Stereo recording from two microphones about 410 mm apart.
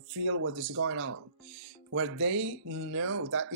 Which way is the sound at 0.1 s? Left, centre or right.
Right.